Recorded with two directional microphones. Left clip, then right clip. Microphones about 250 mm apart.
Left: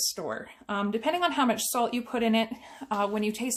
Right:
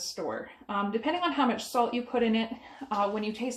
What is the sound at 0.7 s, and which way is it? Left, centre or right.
Speech, left.